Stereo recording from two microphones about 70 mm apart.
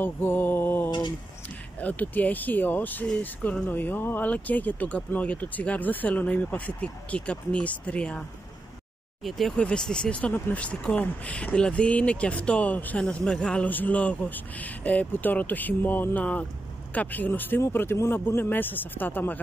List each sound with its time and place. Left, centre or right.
0.0 s speech: left; by 8.2 s centre
9.6 s speech: centre
13.7 s speech: left